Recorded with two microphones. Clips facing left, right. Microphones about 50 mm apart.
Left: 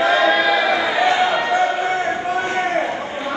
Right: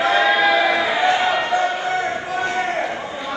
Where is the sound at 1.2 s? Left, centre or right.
Left.